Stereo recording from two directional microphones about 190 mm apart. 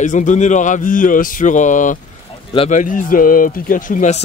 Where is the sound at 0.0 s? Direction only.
40° left (ahead or behind).